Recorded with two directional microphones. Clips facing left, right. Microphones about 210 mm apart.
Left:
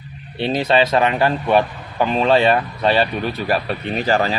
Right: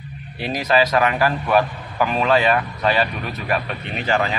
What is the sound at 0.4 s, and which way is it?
A man's voice, 30° left (ahead or behind).